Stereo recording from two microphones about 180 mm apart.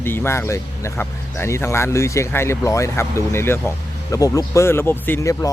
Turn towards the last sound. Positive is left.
turn(degrees=20)  # may be behind; listen again after turning